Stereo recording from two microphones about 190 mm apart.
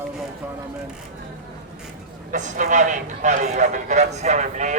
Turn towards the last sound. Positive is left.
turn(degrees=-40)  # may be behind; listen again after turning